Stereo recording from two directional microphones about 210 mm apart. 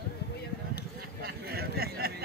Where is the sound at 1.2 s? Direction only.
45° right (ahead or behind).